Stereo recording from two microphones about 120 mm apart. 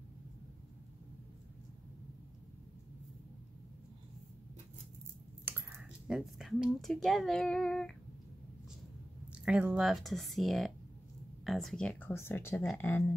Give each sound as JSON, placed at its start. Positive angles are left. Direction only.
{"t": 5.4, "sound": "a sound", "side_deg": -15}
{"t": 5.8, "sound": "a child's voice", "side_deg": -5}
{"t": 9.3, "sound": "speech", "side_deg": -10}